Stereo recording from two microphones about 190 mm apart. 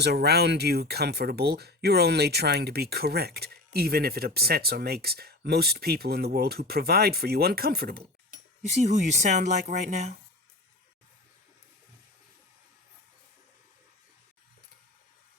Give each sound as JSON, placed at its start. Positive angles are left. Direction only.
{"t": 0.0, "sound": "speech", "side_deg": -60}
{"t": 8.8, "sound": "speech", "side_deg": -40}